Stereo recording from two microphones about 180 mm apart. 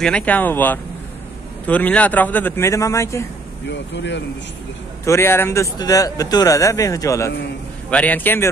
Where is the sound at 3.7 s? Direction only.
75° left (ahead or behind).